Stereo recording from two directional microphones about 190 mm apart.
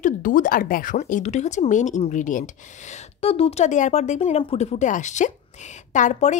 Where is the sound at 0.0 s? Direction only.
45° left (ahead or behind).